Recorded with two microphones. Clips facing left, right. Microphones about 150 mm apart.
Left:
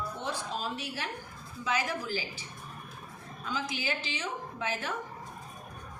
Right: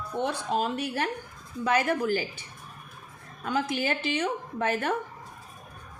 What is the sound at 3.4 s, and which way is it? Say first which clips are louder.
A woman's voice: right 7 dB; 55° right (ahead or behind).